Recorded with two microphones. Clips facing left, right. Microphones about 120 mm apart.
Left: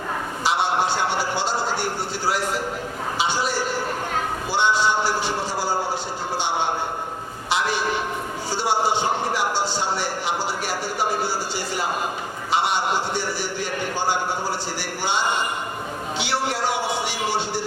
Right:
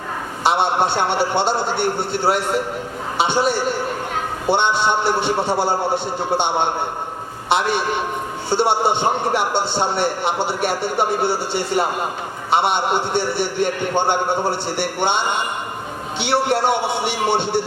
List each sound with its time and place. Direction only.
0.4 s a man's voice: 60° right (ahead or behind)
8.4 s a man's voice: 60° right (ahead or behind)